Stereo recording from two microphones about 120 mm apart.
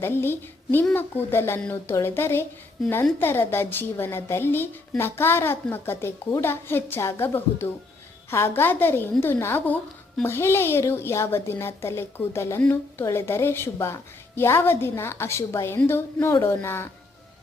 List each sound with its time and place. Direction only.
0.0 s a woman's voice: 20° left (ahead or behind)